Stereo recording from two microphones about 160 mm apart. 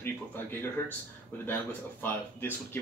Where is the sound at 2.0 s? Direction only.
15° left (ahead or behind).